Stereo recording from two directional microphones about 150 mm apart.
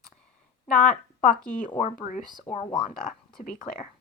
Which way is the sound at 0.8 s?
60° left (ahead or behind).